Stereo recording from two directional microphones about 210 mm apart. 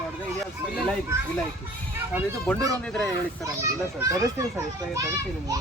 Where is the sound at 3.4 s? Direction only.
15° right (ahead or behind).